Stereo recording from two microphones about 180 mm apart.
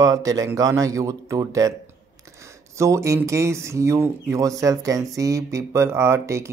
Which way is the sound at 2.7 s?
15° right (ahead or behind).